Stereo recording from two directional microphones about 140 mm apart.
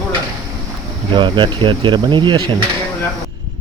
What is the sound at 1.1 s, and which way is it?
Speech, 35° right (ahead or behind).